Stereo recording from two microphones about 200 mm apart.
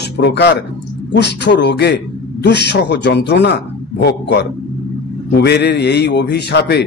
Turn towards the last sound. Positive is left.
turn(degrees=55)  # may be behind; listen again after turning